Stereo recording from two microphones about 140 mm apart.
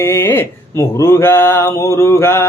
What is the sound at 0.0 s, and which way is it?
Music, 20° left (ahead or behind).